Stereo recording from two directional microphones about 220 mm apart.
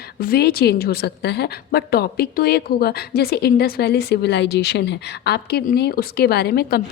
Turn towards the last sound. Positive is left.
turn(degrees=45)  # may be behind; listen again after turning